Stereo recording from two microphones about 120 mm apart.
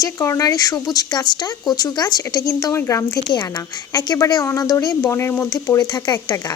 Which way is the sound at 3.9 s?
35° left (ahead or behind).